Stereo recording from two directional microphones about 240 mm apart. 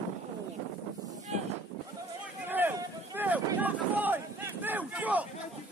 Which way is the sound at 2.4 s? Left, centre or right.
Centre.